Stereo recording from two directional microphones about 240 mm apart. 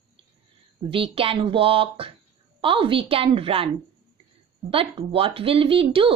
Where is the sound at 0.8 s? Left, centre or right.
Right.